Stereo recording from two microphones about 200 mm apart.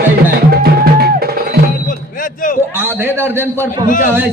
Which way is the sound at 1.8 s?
45° left (ahead or behind).